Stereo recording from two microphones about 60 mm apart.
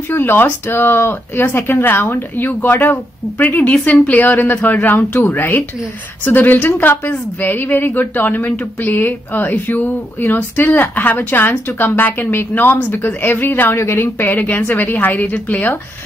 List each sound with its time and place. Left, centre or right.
0.1 s a woman's voice: left